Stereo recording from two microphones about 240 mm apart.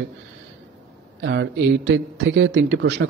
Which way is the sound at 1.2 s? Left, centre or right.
Right.